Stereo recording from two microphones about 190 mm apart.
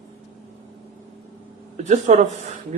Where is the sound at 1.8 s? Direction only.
40° right (ahead or behind).